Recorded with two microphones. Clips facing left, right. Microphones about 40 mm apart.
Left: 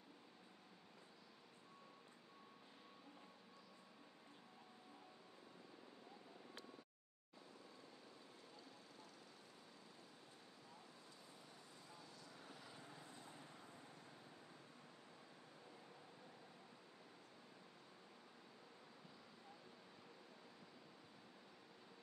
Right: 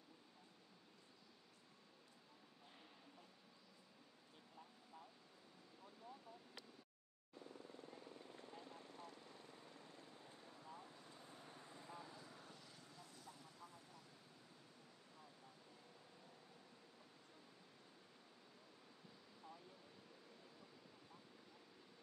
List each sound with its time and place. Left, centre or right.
8.4 s vehicle: right
10.7 s vehicle: right
12.7 s vehicle: left